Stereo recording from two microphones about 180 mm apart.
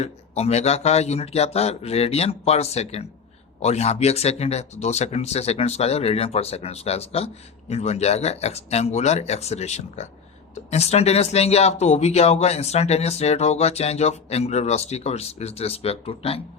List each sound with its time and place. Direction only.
0.0 s speech: 35° left (ahead or behind)